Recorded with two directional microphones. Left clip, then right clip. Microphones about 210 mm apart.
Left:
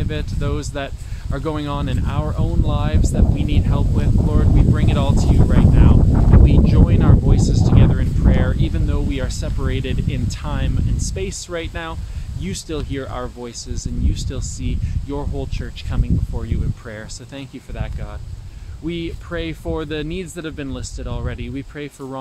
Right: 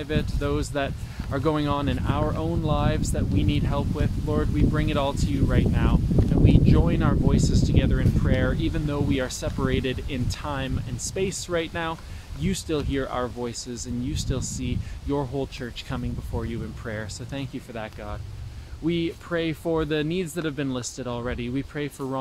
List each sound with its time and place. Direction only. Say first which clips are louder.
0.0 s speech: left 1 dB; centre (ahead or behind)
18.9 s speech: even; 5° right (ahead or behind)